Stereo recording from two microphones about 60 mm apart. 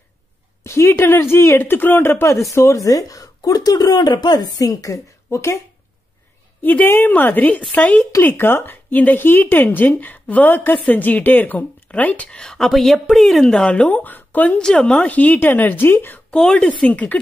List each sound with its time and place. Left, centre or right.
0.7 s speech: left
2.5 s speech: left
6.6 s a woman's voice: left
8.2 s a woman's voice: left
12.3 s speech: centre
13.8 s a woman's voice: left
14.6 s a woman's voice: centre; by 16.2 s left
16.3 s a woman's voice: centre